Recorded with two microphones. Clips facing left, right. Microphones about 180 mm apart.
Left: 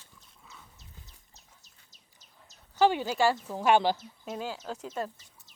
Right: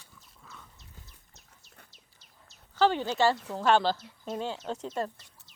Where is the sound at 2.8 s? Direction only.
10° left (ahead or behind).